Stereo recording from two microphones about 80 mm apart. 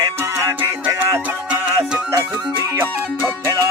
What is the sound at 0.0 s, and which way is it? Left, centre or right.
Music, right.